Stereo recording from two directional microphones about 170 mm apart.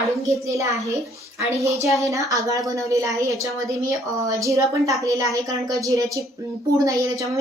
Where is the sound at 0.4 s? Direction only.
20° right (ahead or behind).